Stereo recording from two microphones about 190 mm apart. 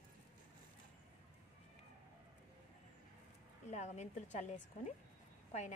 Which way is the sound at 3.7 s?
35° left (ahead or behind).